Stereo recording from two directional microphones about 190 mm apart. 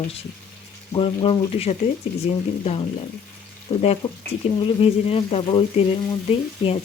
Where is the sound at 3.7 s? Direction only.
30° left (ahead or behind).